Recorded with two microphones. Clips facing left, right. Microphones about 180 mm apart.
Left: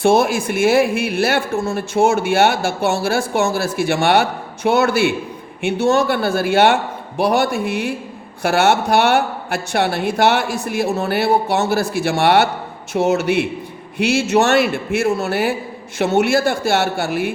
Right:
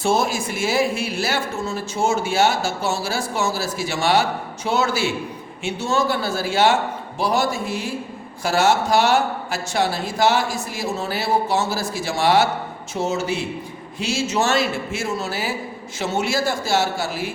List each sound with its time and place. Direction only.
0.0 s speech: 60° left (ahead or behind)